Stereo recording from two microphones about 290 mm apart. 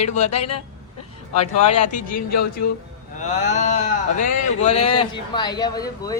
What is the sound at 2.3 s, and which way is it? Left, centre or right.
Speech, left.